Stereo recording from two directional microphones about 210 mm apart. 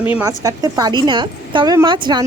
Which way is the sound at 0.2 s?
15° right (ahead or behind).